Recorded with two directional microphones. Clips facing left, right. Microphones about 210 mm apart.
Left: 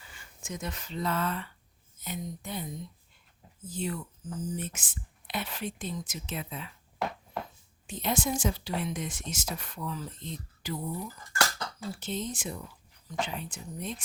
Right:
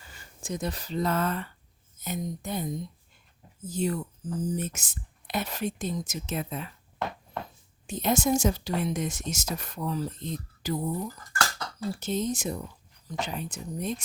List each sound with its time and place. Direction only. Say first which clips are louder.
0.1 s speech: right 5 dB; 35° right (ahead or behind)
3.7 s speech: right 6 dB; 40° right (ahead or behind)
7.9 s speech: right 5 dB; 45° right (ahead or behind)